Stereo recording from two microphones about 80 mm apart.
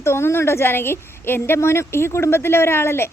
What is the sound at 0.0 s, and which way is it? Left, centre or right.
A woman's voice, left.